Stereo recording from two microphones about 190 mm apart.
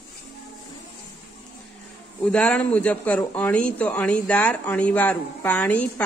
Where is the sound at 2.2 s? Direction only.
5° left (ahead or behind).